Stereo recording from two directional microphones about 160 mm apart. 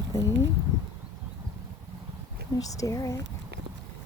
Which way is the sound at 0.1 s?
20° left (ahead or behind).